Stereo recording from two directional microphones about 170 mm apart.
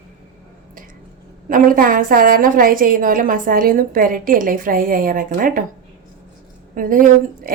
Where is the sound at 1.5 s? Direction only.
55° right (ahead or behind).